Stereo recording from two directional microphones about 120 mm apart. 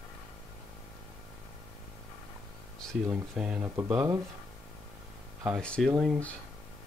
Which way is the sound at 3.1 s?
10° right (ahead or behind).